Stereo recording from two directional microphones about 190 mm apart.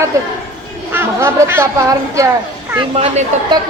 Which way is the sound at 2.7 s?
30° right (ahead or behind).